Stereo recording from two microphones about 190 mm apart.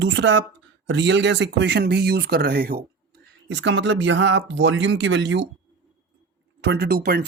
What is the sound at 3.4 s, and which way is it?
Speech, 70° right (ahead or behind).